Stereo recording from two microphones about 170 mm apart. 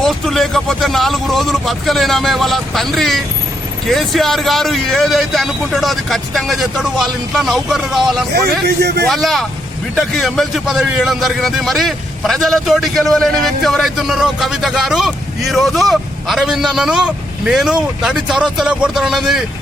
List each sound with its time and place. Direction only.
0.0 s a man's voice: centre (ahead or behind)
8.6 s a man's voice: 70° right (ahead or behind)
9.0 s a man's voice: centre (ahead or behind)